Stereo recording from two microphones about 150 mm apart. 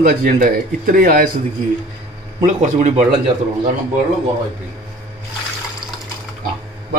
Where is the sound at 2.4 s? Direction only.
55° right (ahead or behind).